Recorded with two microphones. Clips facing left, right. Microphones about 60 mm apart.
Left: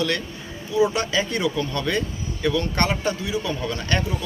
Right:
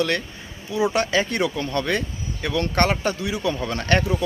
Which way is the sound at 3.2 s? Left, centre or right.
Right.